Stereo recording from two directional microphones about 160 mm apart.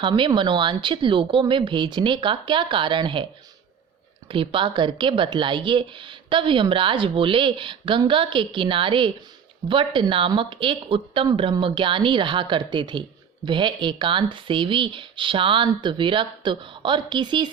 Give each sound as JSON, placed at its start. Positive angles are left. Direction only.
{"t": 0.0, "sound": "speech", "side_deg": -30}
{"t": 4.3, "sound": "speech", "side_deg": -30}